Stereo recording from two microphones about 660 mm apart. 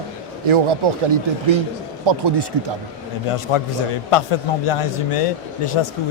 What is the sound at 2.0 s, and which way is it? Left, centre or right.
Speech, right.